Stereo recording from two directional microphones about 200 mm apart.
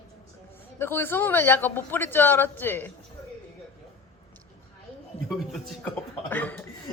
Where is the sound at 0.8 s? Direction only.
10° left (ahead or behind).